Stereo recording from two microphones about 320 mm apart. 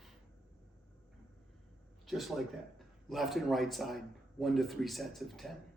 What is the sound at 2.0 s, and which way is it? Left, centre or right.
A man's voice, centre.